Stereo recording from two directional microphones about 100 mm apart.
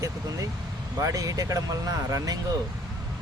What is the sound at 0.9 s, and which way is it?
Speech, 35° right (ahead or behind).